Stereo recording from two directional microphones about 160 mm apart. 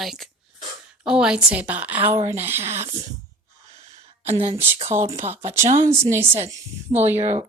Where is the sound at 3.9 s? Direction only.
40° right (ahead or behind).